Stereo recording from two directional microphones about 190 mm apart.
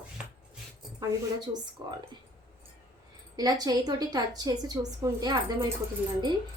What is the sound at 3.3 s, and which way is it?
A woman's voice, 20° right (ahead or behind).